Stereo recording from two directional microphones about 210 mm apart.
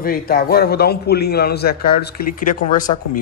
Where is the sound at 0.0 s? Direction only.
45° left (ahead or behind).